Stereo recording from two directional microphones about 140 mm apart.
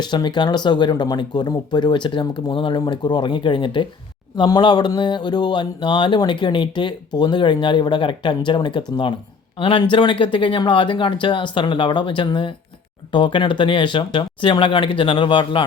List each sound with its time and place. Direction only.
0.0 s speech: 30° left (ahead or behind)